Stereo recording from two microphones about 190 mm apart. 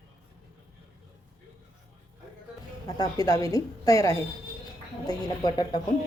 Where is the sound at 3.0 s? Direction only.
20° left (ahead or behind).